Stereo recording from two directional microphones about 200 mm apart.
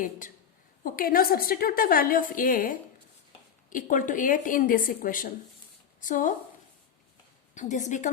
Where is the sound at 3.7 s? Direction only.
40° left (ahead or behind).